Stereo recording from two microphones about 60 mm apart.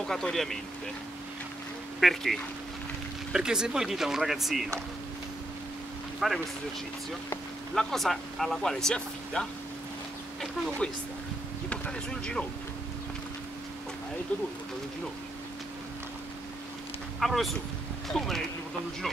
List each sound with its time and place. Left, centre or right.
0.0 s speech: centre
2.0 s speech: centre
3.3 s speech: centre
6.2 s speech: centre
7.7 s speech: centre
11.7 s speech: centre
17.2 s speech: centre